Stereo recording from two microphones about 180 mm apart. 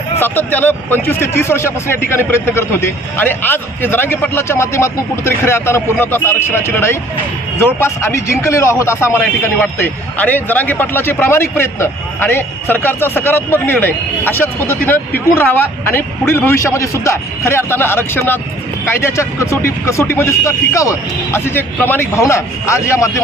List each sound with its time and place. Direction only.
0.2 s a man's voice: 10° left (ahead or behind)